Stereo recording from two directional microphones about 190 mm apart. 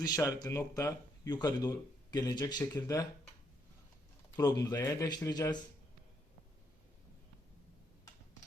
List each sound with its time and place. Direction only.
0.0 s speech: 20° left (ahead or behind)
4.4 s speech: 20° left (ahead or behind)